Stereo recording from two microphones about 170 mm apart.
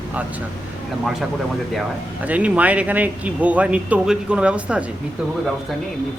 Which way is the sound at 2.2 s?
10° right (ahead or behind).